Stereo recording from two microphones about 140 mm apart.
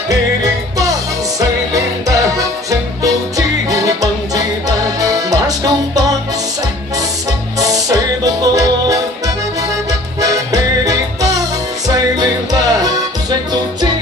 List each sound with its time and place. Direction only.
0.1 s music: 25° right (ahead or behind)
7.5 s music: 25° right (ahead or behind)
10.2 s music: 25° right (ahead or behind)